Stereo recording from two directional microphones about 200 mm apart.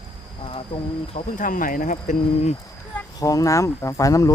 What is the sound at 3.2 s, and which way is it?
Speech, 15° left (ahead or behind).